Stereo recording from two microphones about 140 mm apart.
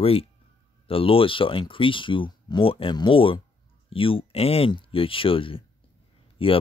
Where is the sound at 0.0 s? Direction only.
45° left (ahead or behind).